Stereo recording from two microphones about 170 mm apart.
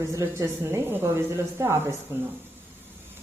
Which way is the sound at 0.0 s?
20° right (ahead or behind).